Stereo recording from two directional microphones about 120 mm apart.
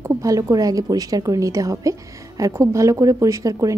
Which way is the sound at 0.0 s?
25° right (ahead or behind).